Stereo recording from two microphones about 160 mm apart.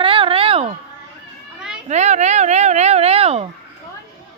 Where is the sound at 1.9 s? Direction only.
45° right (ahead or behind).